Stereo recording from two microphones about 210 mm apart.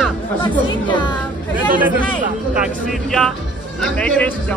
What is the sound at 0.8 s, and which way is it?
Speech, 20° left (ahead or behind).